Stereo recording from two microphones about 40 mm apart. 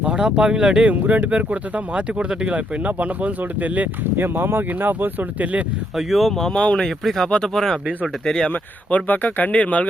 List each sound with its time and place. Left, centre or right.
0.0 s a sound: right
0.3 s speech: centre
0.9 s speech: right
4.2 s speech: right
4.9 s speech: right
6.0 s speech: centre
6.5 s speech: left
6.8 s speech: centre
8.4 s speech: left